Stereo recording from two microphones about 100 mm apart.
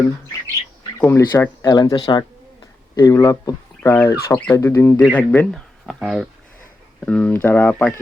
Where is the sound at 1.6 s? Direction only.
40° left (ahead or behind).